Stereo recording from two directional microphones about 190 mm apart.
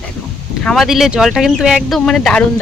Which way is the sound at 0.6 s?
Centre (ahead or behind).